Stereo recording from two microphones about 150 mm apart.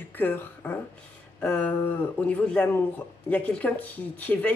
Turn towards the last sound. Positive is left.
turn(degrees=10)  # may be behind; listen again after turning